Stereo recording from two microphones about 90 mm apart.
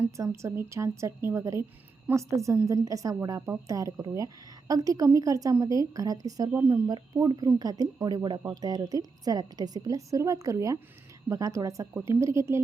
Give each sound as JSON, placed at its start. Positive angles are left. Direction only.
{"t": 0.4, "sound": "a woman's voice", "side_deg": -30}
{"t": 6.5, "sound": "speech", "side_deg": -20}
{"t": 6.8, "sound": "a woman's voice", "side_deg": -45}